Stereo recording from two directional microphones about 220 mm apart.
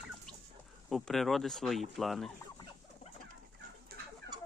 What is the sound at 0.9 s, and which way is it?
Speech, centre (ahead or behind).